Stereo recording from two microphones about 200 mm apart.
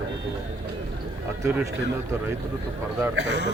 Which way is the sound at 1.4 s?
10° right (ahead or behind).